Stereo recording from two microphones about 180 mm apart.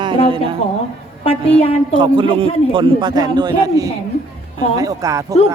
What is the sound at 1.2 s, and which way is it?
Speech, 30° left (ahead or behind).